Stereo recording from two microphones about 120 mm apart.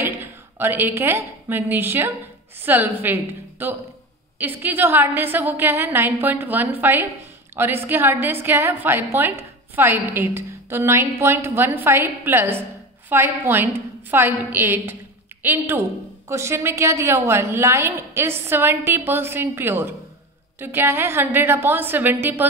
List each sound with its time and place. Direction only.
0.0 s a woman's voice: 20° right (ahead or behind)